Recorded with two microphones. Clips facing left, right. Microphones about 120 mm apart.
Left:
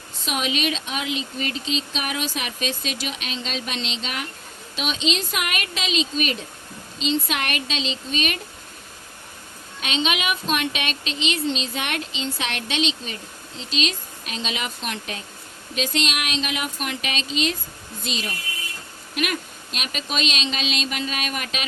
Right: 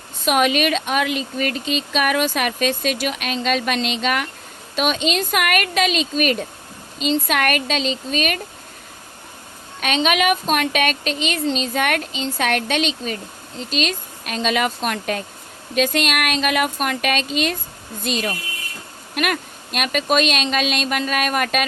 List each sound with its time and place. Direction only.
0.3 s a woman's voice: 55° right (ahead or behind)
9.8 s a woman's voice: 50° right (ahead or behind)